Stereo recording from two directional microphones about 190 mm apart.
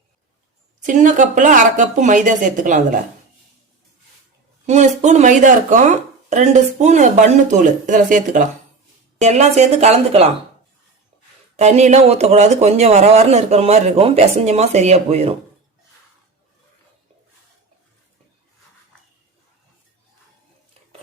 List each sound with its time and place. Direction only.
0.9 s speech: 45° right (ahead or behind)
4.6 s speech: 40° right (ahead or behind)
11.5 s speech: 35° right (ahead or behind)